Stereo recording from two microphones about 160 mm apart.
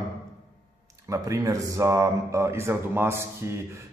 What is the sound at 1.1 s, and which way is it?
Speech, 20° right (ahead or behind).